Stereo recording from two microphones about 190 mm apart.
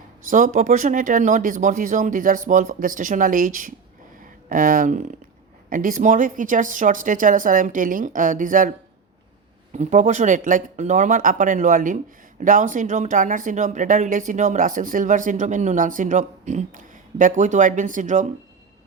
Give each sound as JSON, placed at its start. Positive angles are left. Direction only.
{"t": 0.3, "sound": "speech", "side_deg": -45}
{"t": 9.7, "sound": "speech", "side_deg": -40}